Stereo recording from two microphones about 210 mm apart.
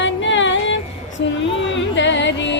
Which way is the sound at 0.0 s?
60° left (ahead or behind).